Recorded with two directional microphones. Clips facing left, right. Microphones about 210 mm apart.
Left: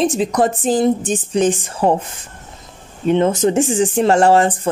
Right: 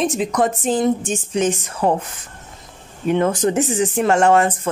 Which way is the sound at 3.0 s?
25° left (ahead or behind).